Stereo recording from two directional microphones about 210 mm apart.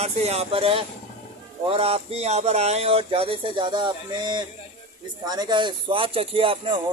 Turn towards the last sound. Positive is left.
turn(degrees=-25)  # may be behind; listen again after turning